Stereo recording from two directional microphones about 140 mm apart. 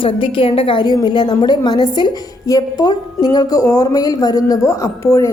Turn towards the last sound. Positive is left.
turn(degrees=20)  # may be behind; listen again after turning